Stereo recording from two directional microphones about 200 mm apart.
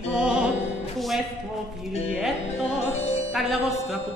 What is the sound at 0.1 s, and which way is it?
Music, 5° right (ahead or behind).